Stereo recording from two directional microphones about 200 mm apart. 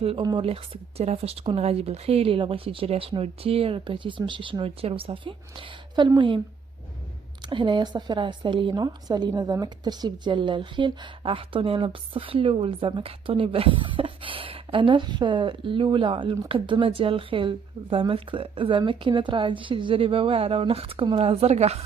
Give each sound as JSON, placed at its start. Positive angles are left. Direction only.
{"t": 0.0, "sound": "speech", "side_deg": -25}
{"t": 7.4, "sound": "speech", "side_deg": -25}